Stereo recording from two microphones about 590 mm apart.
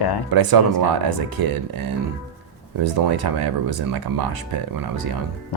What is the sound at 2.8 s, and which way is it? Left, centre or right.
Speech, right.